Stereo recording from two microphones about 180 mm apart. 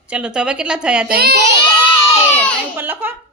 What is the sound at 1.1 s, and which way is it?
Speech, 60° right (ahead or behind).